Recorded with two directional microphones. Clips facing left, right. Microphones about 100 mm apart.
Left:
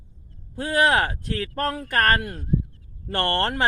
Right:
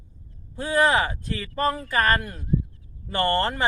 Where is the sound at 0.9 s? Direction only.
70° left (ahead or behind).